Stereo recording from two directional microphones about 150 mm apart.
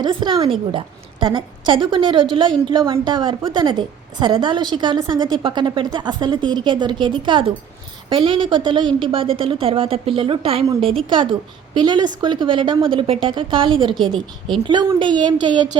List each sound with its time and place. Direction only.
0.0 s a woman's voice: 30° right (ahead or behind)